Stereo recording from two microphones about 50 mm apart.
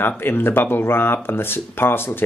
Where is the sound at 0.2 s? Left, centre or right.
Left.